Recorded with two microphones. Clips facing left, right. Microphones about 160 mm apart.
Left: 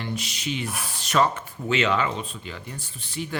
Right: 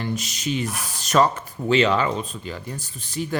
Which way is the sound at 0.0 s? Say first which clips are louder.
Right 4 dB; 45° right (ahead or behind).